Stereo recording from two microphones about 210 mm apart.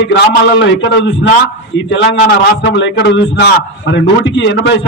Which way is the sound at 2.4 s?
60° left (ahead or behind).